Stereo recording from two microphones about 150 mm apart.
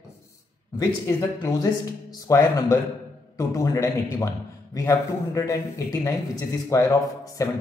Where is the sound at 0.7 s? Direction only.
25° left (ahead or behind).